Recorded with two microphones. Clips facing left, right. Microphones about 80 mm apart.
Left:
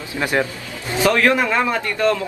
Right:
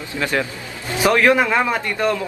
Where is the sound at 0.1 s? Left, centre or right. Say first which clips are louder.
Left 2 dB; centre.